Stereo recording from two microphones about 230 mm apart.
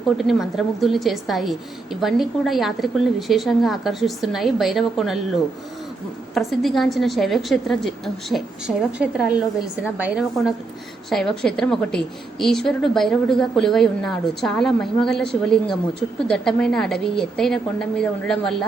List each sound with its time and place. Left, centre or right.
0.2 s a woman's voice: centre
6.3 s a woman's voice: centre